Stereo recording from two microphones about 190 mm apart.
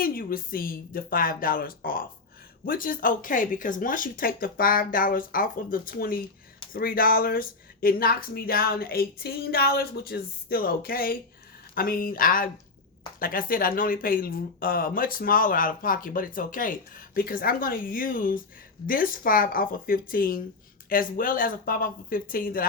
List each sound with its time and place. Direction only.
0.0 s speech: 50° left (ahead or behind)